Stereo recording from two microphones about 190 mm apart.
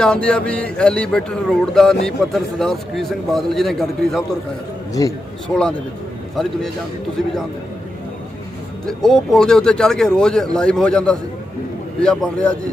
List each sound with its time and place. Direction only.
0.0 s speech: 5° left (ahead or behind)
5.0 s a man's voice: 20° left (ahead or behind)
6.3 s speech: centre (ahead or behind)
8.9 s speech: centre (ahead or behind)